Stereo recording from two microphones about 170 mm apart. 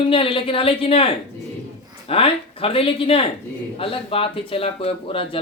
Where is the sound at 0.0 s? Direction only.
30° left (ahead or behind).